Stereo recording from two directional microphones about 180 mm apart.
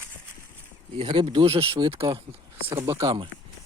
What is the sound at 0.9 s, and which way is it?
Speech, 35° right (ahead or behind).